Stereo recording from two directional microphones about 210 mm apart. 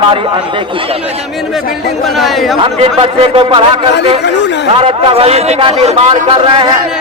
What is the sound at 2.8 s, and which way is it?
Speech, 25° right (ahead or behind).